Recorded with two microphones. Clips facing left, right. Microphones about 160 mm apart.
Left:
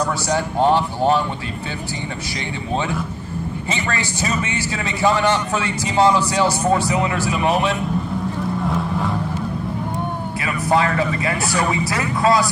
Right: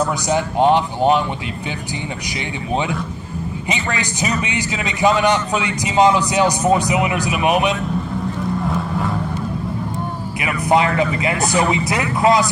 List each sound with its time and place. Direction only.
0.3 s a man's voice: 15° right (ahead or behind)
3.6 s a man's voice: 15° right (ahead or behind)
8.6 s boat: centre (ahead or behind)
10.4 s speech: 15° right (ahead or behind)